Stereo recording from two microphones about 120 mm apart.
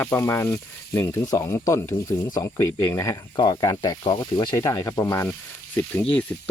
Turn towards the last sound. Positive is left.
turn(degrees=15)  # may be behind; listen again after turning